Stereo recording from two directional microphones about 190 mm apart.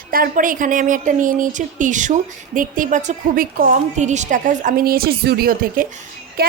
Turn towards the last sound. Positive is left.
turn(degrees=-55)  # may be behind; listen again after turning